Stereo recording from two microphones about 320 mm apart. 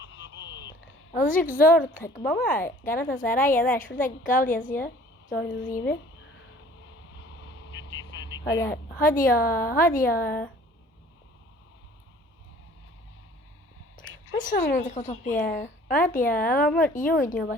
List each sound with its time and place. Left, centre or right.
0.0 s a sound: left
1.1 s a woman's voice: left
2.6 s speech: centre
3.0 s speech: left
7.2 s vehicle: left
8.4 s speech: centre
8.7 s speech: left
10.2 s speech: centre
14.0 s a sound: left
14.7 s speech: left